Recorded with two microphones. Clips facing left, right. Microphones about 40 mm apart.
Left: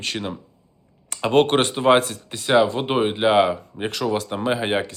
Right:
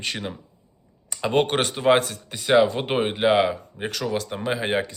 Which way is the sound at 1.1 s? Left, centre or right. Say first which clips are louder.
Left 2 dB; left.